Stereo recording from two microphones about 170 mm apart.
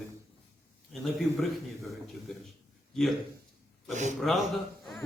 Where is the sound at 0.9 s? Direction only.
Centre (ahead or behind).